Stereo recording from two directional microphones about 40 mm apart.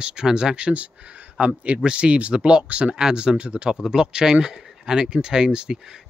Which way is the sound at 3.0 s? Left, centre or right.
Centre.